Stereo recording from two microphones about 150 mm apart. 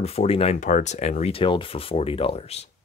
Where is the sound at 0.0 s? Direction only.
45° left (ahead or behind).